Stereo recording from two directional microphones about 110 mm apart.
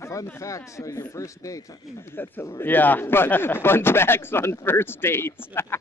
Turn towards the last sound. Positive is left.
turn(degrees=20)  # may be behind; listen again after turning